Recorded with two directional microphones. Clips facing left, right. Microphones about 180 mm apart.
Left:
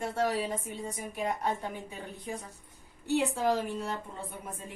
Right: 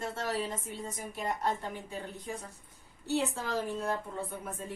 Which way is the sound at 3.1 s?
15° left (ahead or behind).